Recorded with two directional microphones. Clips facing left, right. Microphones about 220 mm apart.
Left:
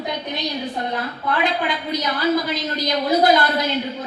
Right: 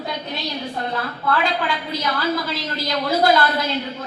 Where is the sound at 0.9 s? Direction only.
20° left (ahead or behind).